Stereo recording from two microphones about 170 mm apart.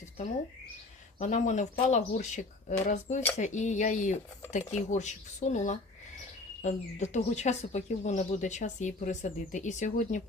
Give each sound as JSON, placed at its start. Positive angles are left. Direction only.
{"t": 1.2, "sound": "speech", "side_deg": 45}